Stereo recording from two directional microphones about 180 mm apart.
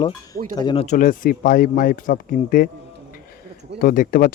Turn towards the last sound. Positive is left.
turn(degrees=50)  # may be behind; listen again after turning